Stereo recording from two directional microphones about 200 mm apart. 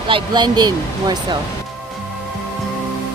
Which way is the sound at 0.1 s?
20° right (ahead or behind).